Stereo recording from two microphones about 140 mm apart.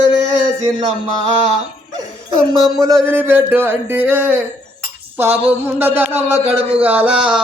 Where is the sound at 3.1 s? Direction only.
15° right (ahead or behind).